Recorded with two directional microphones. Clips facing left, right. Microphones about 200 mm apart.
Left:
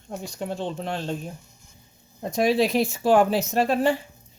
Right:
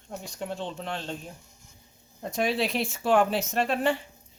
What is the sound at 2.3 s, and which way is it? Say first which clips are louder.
Speech: left 6 dB; 40° left (ahead or behind).